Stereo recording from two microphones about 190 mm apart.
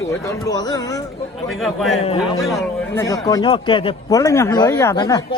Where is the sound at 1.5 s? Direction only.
Centre (ahead or behind).